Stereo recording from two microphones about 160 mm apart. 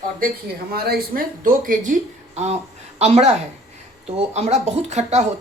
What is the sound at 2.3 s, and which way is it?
Speech, 40° right (ahead or behind).